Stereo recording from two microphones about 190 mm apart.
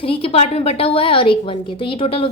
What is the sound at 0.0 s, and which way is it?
A woman's voice, 30° left (ahead or behind).